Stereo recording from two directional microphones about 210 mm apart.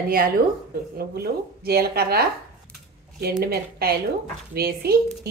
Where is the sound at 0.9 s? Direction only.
45° right (ahead or behind).